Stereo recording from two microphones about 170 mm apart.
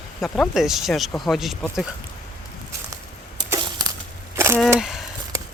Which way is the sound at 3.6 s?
20° right (ahead or behind).